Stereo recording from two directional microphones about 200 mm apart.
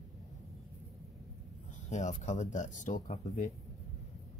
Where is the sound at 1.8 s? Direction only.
35° left (ahead or behind).